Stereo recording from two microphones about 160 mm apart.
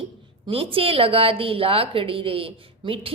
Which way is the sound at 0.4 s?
35° right (ahead or behind).